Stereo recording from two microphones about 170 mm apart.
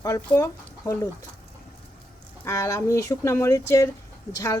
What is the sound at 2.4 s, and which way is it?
Speech, 20° left (ahead or behind).